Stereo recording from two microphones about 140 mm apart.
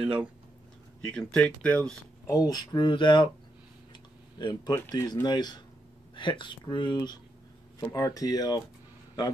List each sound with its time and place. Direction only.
0.0 s speech: 10° right (ahead or behind)
1.0 s speech: 5° left (ahead or behind)
2.2 s speech: 25° left (ahead or behind)
3.9 s a sound: 35° left (ahead or behind)
4.7 s speech: 20° left (ahead or behind)